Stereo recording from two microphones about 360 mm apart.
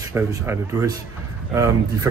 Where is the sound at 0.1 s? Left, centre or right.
Centre.